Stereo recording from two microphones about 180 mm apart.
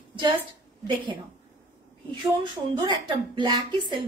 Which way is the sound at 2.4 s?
25° right (ahead or behind).